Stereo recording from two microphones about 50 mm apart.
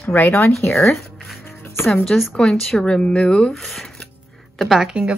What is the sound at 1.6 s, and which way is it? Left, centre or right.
Music, left.